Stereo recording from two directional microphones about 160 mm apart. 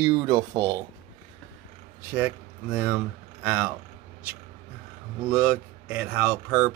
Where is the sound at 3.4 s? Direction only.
10° right (ahead or behind).